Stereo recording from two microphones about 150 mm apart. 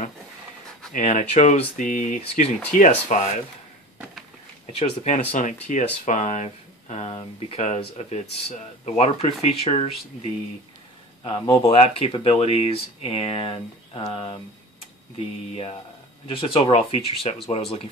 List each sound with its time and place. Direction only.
0.9 s speech: 55° left (ahead or behind)
4.7 s speech: 50° left (ahead or behind)
11.2 s speech: 35° left (ahead or behind)
16.3 s speech: 35° left (ahead or behind)